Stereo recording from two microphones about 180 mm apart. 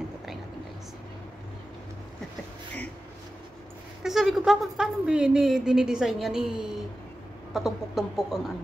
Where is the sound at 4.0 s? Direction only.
Centre (ahead or behind).